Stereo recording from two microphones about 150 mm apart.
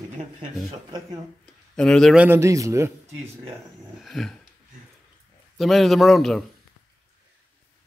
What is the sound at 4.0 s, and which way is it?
Speech, centre (ahead or behind).